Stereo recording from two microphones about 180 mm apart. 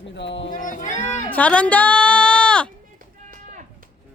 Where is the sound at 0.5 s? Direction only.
45° left (ahead or behind).